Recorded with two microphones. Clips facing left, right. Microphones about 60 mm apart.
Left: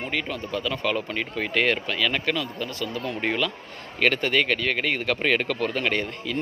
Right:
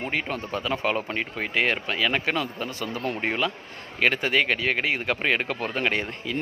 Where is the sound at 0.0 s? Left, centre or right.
Right.